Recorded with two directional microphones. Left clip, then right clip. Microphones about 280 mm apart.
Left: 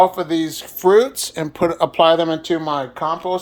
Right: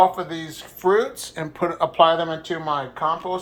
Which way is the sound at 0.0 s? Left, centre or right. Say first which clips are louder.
Left 3 dB; left.